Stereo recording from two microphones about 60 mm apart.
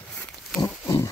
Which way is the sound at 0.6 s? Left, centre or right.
Left.